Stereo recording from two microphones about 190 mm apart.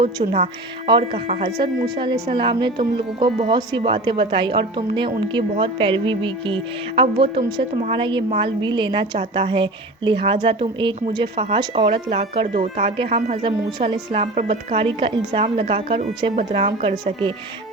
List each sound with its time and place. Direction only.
0.0 s a woman's voice: 25° right (ahead or behind)